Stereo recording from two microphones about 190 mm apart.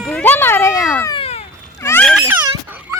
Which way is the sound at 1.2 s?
35° left (ahead or behind).